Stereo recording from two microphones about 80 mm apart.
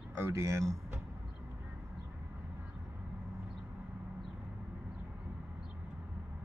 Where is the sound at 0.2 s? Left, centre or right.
Right.